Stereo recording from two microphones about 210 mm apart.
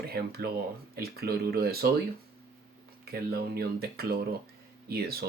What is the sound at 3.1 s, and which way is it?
Speech, 45° right (ahead or behind).